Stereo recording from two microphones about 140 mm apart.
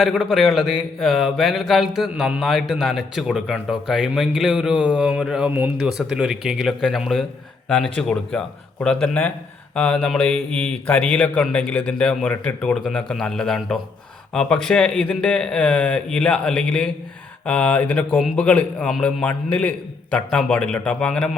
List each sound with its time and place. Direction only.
0.0 s speech: 5° right (ahead or behind)
5.5 s speech: 15° right (ahead or behind)
5.9 s a man's voice: 5° right (ahead or behind)